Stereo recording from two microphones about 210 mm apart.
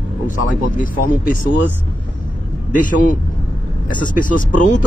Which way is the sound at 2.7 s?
40° left (ahead or behind).